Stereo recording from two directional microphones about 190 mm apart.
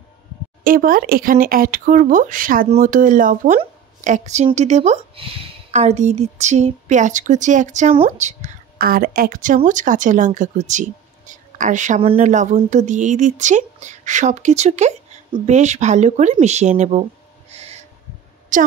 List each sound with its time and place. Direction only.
0.7 s speech: 50° right (ahead or behind)
17.5 s owl: 35° right (ahead or behind)
18.5 s a woman's voice: 45° right (ahead or behind)